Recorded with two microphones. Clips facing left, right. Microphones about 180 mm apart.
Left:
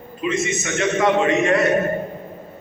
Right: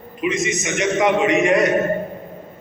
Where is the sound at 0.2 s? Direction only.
15° right (ahead or behind).